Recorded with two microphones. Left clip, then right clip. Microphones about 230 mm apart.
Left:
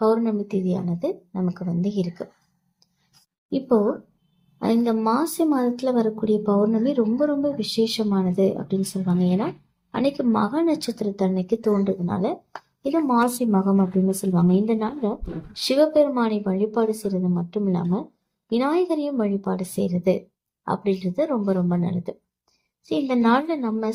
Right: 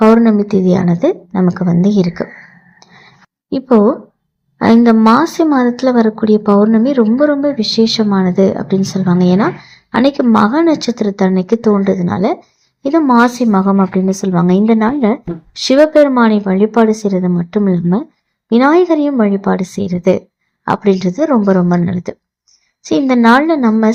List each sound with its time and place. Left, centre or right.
0.0 s speech: right
3.5 s speech: right